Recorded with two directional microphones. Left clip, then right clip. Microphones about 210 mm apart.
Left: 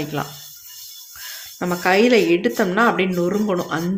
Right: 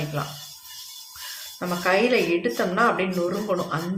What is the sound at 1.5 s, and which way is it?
Speech, 45° left (ahead or behind).